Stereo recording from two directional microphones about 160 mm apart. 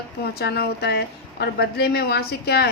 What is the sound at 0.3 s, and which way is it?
Speech, 85° left.